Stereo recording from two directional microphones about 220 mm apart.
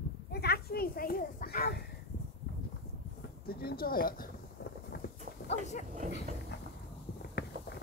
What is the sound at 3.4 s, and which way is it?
Speech, 45° left (ahead or behind).